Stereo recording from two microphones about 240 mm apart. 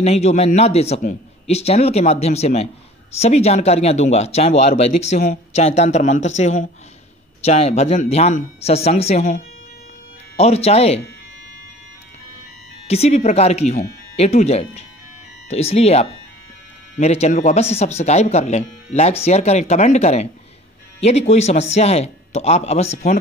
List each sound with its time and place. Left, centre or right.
0.0 s speech: left
12.8 s speech: left